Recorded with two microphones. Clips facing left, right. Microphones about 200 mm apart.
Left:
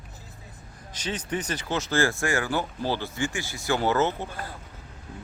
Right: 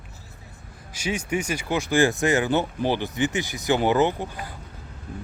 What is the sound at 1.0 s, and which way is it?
Speech, 10° right (ahead or behind).